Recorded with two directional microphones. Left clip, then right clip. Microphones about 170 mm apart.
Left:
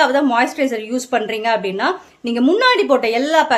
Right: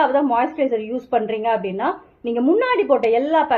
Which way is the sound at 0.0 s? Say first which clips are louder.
Left 3 dB; 30° left (ahead or behind).